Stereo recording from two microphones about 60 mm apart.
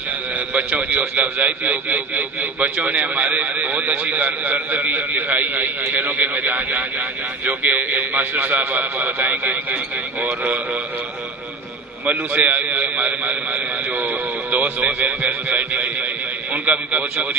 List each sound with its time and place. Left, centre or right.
0.5 s a man's voice: right
12.1 s a man's voice: right